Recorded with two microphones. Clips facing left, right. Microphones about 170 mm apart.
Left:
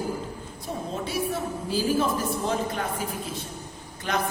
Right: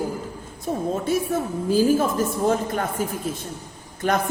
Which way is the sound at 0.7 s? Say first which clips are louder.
Right 8 dB; 45° right (ahead or behind).